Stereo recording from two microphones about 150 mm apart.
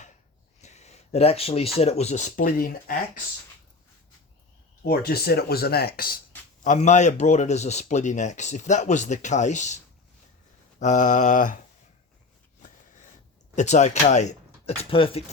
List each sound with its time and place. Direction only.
0.6 s speech: 50° left (ahead or behind); by 2.9 s 70° left (ahead or behind)
4.9 s speech: 90° left
6.7 s speech: 50° left (ahead or behind)
10.8 s mantra: 55° left (ahead or behind)
13.6 s speech: 50° left (ahead or behind)
14.8 s speech: 35° left (ahead or behind)